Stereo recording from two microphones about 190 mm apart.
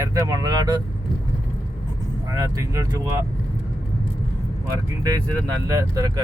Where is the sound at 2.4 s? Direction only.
15° right (ahead or behind).